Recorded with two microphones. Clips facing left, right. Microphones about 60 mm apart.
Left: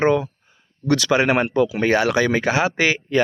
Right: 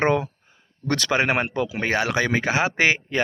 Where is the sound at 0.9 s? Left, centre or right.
Right.